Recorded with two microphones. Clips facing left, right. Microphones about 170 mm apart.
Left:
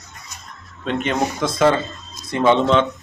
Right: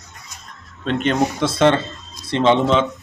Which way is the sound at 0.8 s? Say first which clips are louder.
Right 2 dB; 10° left (ahead or behind).